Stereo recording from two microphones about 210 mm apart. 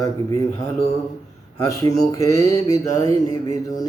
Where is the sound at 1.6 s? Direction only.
15° left (ahead or behind).